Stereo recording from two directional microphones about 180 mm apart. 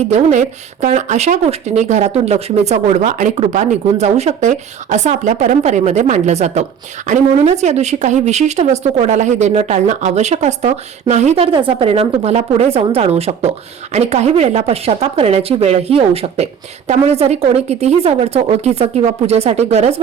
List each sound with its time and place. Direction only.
0.1 s speech: 40° right (ahead or behind)
11.5 s speech: 30° right (ahead or behind)